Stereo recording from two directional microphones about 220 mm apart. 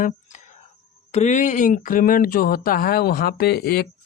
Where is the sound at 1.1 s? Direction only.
30° left (ahead or behind).